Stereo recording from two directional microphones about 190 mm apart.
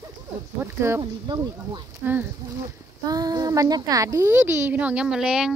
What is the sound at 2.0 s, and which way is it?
A woman's voice, 10° right (ahead or behind).